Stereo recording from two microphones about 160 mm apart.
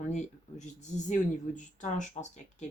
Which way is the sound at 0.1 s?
45° left (ahead or behind).